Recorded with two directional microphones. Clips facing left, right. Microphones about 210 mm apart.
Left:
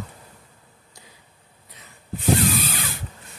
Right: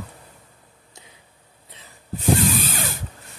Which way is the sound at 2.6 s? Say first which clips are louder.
Right 1 dB; 45° right (ahead or behind).